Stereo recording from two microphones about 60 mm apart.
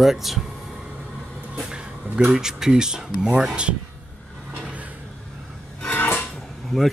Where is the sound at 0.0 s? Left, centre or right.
Centre.